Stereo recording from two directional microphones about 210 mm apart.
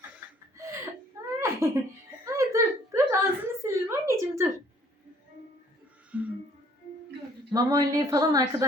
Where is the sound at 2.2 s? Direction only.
15° right (ahead or behind).